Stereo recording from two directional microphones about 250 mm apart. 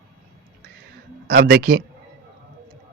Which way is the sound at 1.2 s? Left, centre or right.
Right.